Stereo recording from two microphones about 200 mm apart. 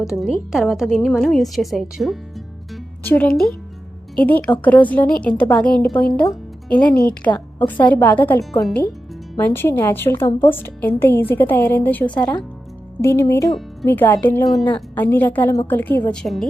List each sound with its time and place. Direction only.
0.0 s a woman's voice: centre (ahead or behind)
7.3 s a woman's voice: 20° left (ahead or behind)
7.7 s a woman's voice: 10° left (ahead or behind)